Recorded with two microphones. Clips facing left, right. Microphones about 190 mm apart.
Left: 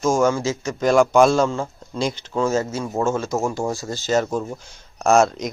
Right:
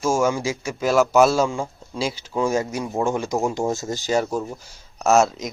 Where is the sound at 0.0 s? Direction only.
10° right (ahead or behind).